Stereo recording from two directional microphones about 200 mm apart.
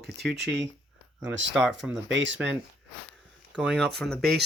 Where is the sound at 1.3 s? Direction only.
65° right (ahead or behind).